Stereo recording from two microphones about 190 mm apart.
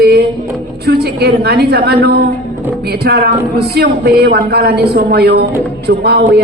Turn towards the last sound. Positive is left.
turn(degrees=-55)  # may be behind; listen again after turning